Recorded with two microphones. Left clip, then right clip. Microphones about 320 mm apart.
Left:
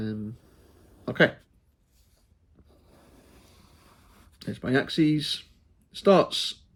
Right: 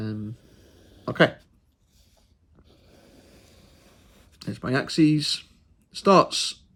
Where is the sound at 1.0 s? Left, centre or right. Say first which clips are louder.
Right 2 dB; centre.